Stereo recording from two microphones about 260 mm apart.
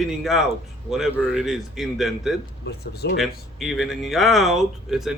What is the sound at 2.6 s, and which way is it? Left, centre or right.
Speech, left.